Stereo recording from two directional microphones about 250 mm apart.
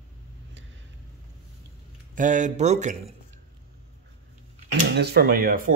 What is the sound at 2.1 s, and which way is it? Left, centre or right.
Speech, right.